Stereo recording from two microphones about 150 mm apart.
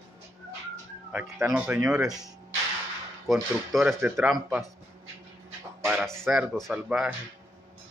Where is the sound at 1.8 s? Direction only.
5° right (ahead or behind).